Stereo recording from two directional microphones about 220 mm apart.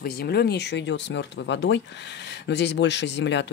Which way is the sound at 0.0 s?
45° left (ahead or behind).